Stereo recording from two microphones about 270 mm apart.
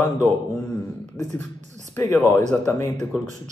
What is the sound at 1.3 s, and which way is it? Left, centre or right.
Speech, right.